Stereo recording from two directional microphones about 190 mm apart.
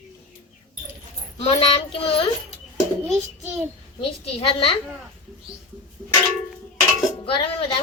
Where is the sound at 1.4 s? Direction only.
30° left (ahead or behind).